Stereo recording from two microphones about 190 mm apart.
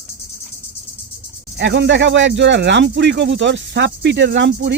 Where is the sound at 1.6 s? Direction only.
70° right (ahead or behind).